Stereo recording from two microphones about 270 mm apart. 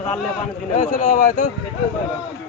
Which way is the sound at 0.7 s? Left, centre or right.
Left.